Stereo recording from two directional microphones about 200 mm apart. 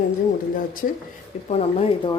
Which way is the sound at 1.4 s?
35° left (ahead or behind).